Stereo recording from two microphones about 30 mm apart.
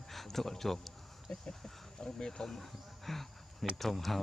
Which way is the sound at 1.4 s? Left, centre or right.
Left.